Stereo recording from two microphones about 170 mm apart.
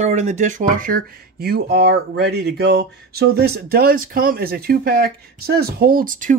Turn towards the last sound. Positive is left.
turn(degrees=-50)  # may be behind; listen again after turning